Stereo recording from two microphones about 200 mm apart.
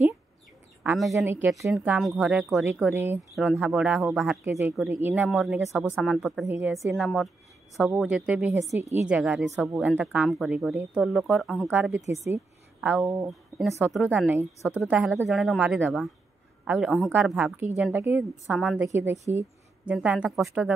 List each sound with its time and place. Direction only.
0.8 s a woman's voice: centre (ahead or behind)
1.1 s a woman's voice: 15° right (ahead or behind)
1.7 s a woman's voice: centre (ahead or behind)
2.9 s a woman's voice: 10° right (ahead or behind)
4.5 s a woman's voice: 15° right (ahead or behind)
13.3 s a woman's voice: centre (ahead or behind)